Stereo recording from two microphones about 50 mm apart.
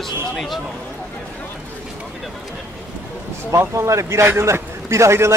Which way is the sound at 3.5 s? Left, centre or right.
Right.